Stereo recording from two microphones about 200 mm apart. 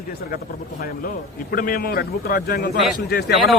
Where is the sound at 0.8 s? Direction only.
45° left (ahead or behind).